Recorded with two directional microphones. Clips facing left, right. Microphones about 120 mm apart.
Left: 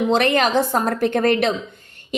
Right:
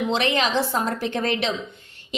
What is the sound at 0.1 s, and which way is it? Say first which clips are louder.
A woman's voice: left 5 dB; 50° left (ahead or behind).